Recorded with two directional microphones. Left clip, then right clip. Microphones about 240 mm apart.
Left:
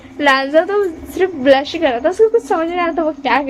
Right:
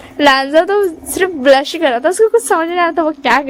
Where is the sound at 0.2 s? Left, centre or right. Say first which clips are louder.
Right 3 dB; right.